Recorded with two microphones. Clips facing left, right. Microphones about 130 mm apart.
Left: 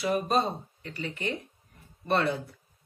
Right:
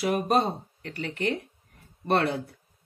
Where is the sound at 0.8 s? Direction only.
65° right (ahead or behind).